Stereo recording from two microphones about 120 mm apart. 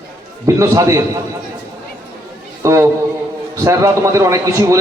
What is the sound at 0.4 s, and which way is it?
Speech, 25° right (ahead or behind).